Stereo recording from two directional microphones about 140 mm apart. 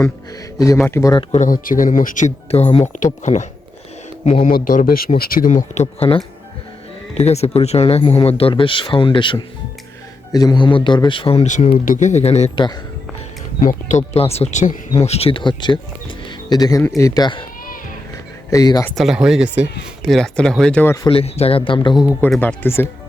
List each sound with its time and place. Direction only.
0.9 s speech: 15° left (ahead or behind)
1.3 s speech: 70° left (ahead or behind)
4.4 s a man's voice: 80° left; by 11.4 s 40° left (ahead or behind)
11.4 s speech: 60° left (ahead or behind)
13.6 s speech: 65° left (ahead or behind)
15.0 s a man's voice: 45° left (ahead or behind); by 17.4 s 30° left (ahead or behind)
18.5 s speech: 25° left (ahead or behind)
18.9 s speech: 5° right (ahead or behind)
20.8 s speech: 20° left (ahead or behind)
21.1 s a man's voice: 45° left (ahead or behind)
22.4 s speech: 15° left (ahead or behind)